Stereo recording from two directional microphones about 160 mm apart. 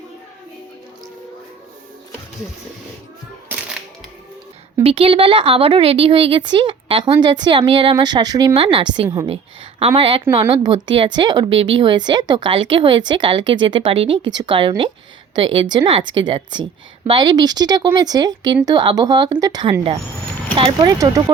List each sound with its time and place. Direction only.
4.8 s a woman's voice: 35° right (ahead or behind)